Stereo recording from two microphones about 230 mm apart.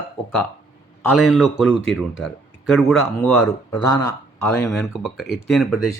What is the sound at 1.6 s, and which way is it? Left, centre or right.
Speech, left.